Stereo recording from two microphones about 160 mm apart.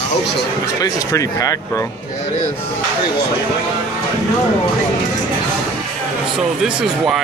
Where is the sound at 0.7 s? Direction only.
20° left (ahead or behind).